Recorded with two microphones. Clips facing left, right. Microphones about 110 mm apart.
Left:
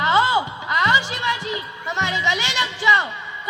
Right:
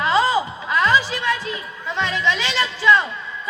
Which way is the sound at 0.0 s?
20° left (ahead or behind).